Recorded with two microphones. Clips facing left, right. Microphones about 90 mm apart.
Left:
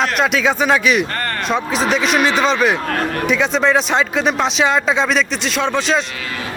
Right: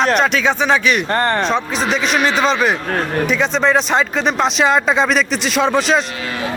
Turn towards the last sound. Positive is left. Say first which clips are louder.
# right 3 dB
turn(degrees=0)  # may be behind; listen again after turning